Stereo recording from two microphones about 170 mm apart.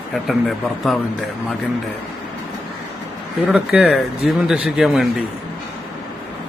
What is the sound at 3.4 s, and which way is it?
Speech, 5° right (ahead or behind).